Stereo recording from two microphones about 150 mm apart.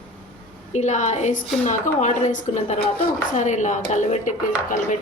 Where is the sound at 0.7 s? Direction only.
50° left (ahead or behind).